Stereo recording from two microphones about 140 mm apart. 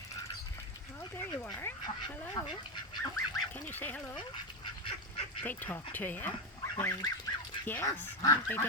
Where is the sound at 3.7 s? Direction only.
15° left (ahead or behind).